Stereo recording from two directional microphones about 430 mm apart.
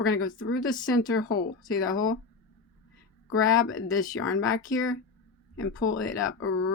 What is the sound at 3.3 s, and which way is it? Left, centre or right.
Speech, left.